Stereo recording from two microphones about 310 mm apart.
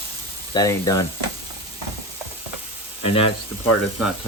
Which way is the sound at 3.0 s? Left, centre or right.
Centre.